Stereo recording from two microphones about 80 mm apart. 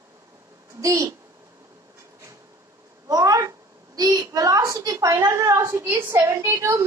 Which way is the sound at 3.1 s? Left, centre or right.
Right.